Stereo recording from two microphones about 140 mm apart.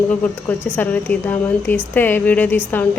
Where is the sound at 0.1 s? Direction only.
15° left (ahead or behind).